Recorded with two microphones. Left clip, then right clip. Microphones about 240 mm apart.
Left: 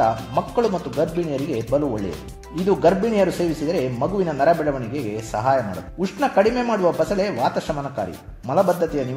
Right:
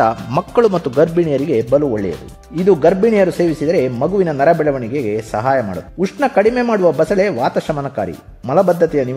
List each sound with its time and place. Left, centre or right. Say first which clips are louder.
0.0 s speech: right 5 dB; right
2.6 s speech: right 6 dB; right